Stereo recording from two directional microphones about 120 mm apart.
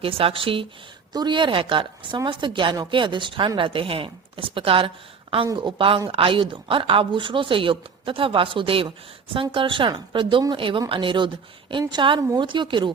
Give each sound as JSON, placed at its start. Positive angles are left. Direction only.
{"t": 0.0, "sound": "a woman's voice", "side_deg": -50}